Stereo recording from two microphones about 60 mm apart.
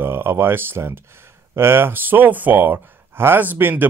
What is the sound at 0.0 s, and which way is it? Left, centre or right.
Speech, right.